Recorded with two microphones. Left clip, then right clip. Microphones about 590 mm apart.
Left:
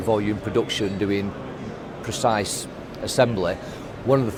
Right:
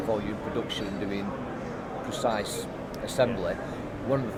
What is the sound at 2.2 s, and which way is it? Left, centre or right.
Speech, left.